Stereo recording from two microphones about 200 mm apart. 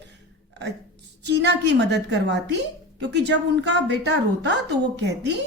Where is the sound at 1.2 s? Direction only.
60° right (ahead or behind).